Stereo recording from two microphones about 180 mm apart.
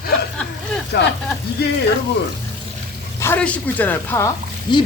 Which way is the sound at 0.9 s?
65° left (ahead or behind).